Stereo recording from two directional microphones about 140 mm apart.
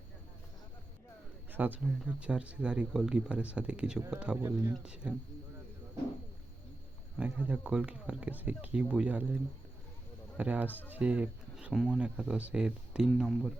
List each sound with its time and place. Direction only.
1.5 s speech: 15° right (ahead or behind)
4.4 s speech: 20° right (ahead or behind)
4.8 s speech: 5° right (ahead or behind)
7.2 s speech: 10° right (ahead or behind)